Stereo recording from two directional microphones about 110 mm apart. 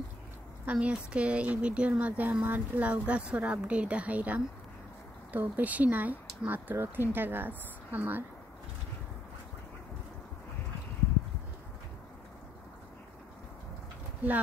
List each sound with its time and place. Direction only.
0.7 s speech: 10° right (ahead or behind)